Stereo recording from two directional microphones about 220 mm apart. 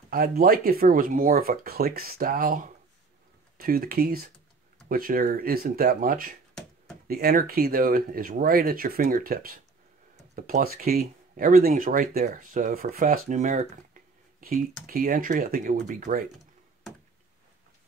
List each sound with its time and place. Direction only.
0.1 s speech: 45° right (ahead or behind)